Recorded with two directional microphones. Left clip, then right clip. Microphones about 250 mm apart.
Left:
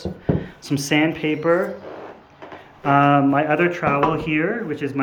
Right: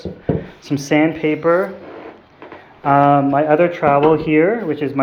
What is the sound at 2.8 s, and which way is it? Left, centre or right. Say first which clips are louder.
Speech: right 3 dB; centre.